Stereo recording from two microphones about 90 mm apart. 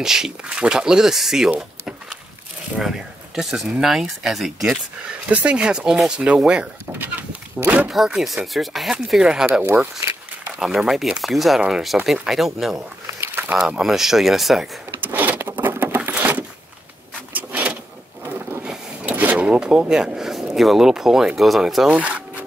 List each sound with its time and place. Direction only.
0.0 s speech: 5° right (ahead or behind)
2.8 s speech: 5° right (ahead or behind)
5.3 s speech: 15° right (ahead or behind)
7.9 s speech: 5° right (ahead or behind)
10.6 s speech: 5° right (ahead or behind)
13.2 s a sound: 25° right (ahead or behind)
13.6 s speech: 5° right (ahead or behind)
15.0 s patter: 20° right (ahead or behind)
16.1 s a sound: 20° right (ahead or behind)
18.6 s drawer open or close: 15° right (ahead or behind)